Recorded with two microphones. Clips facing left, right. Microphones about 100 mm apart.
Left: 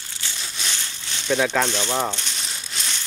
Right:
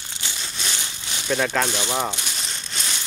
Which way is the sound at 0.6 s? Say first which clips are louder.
Right 1 dB; 10° right (ahead or behind).